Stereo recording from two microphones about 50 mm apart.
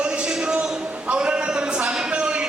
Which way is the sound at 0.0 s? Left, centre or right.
Centre.